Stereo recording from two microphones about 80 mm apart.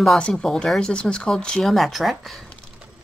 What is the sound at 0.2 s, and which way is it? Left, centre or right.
Speech, centre.